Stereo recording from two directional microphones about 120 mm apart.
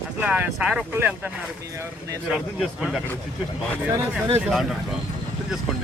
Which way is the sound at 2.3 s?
5° right (ahead or behind).